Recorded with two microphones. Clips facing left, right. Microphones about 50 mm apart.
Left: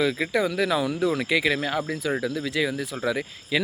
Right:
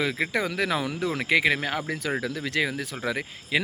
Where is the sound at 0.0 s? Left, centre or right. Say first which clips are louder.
Left 3 dB; right.